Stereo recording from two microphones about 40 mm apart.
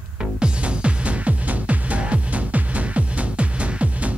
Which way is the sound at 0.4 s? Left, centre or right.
Right.